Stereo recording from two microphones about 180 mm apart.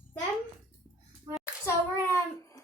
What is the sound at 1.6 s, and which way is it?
Child singing, 15° left (ahead or behind).